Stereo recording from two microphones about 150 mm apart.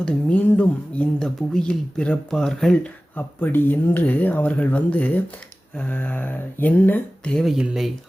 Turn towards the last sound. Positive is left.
turn(degrees=0)  # may be behind; listen again after turning